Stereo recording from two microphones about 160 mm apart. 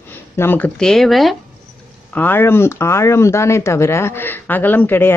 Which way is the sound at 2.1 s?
10° left (ahead or behind).